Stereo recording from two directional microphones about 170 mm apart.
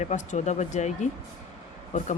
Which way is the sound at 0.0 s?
45° left (ahead or behind).